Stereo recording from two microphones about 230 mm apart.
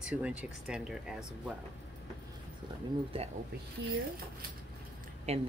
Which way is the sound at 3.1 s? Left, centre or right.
Right.